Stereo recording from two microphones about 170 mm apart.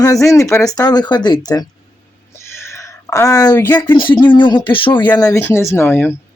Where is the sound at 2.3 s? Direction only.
15° left (ahead or behind).